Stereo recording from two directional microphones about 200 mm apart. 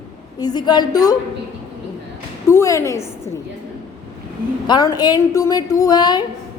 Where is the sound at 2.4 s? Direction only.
15° left (ahead or behind).